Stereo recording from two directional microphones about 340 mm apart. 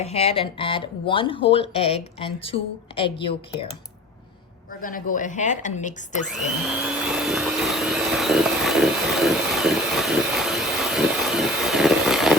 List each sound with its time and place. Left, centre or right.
0.0 s speech: centre
4.8 s a woman's voice: left
6.3 s vacuum cleaner: centre